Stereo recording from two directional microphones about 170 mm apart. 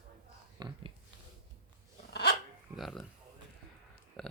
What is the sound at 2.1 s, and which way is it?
Dog, 75° left (ahead or behind).